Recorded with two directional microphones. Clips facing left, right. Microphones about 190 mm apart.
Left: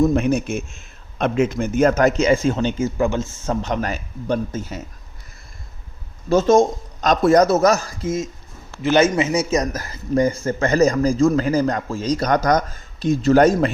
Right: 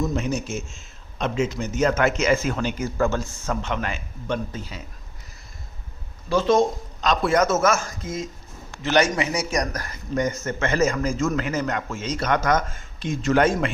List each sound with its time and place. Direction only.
0.0 s a man's voice: 55° left (ahead or behind); by 3.2 s 20° left (ahead or behind)
3.4 s a man's voice: 35° left (ahead or behind)
6.2 s a man's voice: 45° left (ahead or behind)